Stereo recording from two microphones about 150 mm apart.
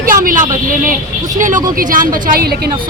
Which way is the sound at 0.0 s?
70° right (ahead or behind).